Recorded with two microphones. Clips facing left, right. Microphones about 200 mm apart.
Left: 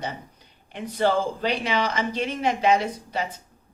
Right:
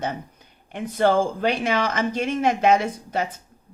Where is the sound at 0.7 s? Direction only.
50° right (ahead or behind).